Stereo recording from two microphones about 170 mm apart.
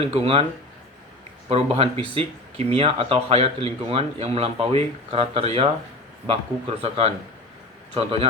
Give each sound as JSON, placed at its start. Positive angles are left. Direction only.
{"t": 0.0, "sound": "speech", "side_deg": -35}
{"t": 1.5, "sound": "speech", "side_deg": -35}